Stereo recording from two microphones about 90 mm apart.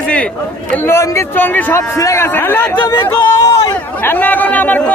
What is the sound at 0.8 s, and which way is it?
A man's voice, 30° left (ahead or behind).